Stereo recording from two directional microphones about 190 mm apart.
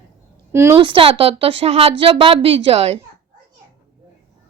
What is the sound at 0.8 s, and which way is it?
A woman's voice, 25° right (ahead or behind).